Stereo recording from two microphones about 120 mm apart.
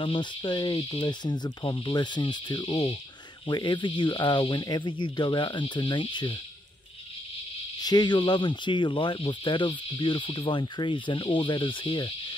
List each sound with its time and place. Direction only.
0.0 s speech: 40° left (ahead or behind)
7.8 s speech: 35° left (ahead or behind)